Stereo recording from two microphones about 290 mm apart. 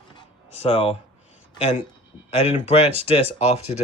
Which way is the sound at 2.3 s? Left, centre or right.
Left.